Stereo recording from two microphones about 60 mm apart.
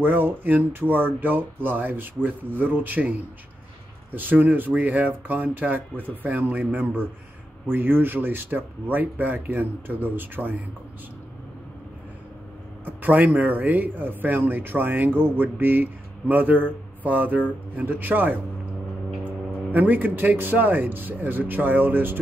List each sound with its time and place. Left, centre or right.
0.0 s a man's voice: right
12.8 s a man's voice: right